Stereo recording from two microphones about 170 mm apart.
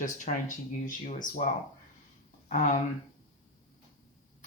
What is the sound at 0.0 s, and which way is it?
Speech, 50° left (ahead or behind).